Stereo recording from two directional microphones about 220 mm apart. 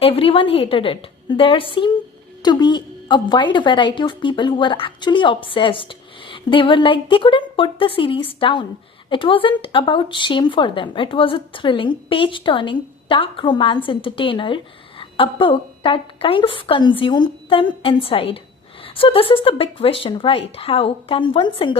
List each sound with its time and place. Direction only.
0.0 s speech: 25° left (ahead or behind)